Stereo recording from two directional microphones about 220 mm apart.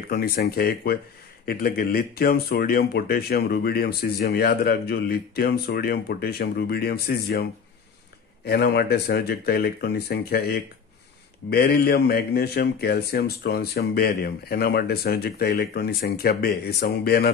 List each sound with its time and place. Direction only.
0.1 s speech: 45° left (ahead or behind)
8.5 s speech: 45° left (ahead or behind)